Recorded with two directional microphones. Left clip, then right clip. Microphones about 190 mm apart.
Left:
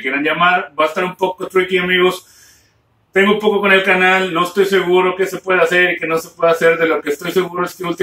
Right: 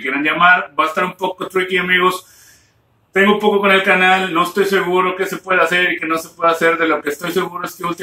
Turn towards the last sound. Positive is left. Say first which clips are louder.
# left 2 dB
turn(degrees=0)  # may be behind; listen again after turning